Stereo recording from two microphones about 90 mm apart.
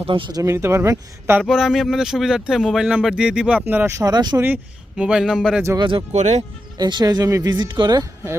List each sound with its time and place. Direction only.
0.0 s speech: 70° right (ahead or behind)
0.4 s speech: 30° right (ahead or behind)
1.4 s speech: 5° right (ahead or behind)
3.7 s speech: 20° right (ahead or behind)
3.9 s speech: 45° right (ahead or behind)
4.4 s speech: 20° right (ahead or behind)
5.7 s speech: 55° right (ahead or behind); by 7.5 s 40° right (ahead or behind)
7.5 s speech: 60° right (ahead or behind)